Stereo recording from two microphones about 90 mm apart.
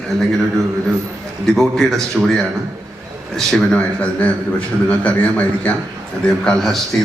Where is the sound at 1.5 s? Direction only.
5° left (ahead or behind).